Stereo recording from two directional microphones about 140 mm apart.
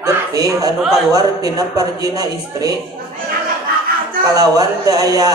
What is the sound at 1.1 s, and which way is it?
A man's voice, 30° right (ahead or behind).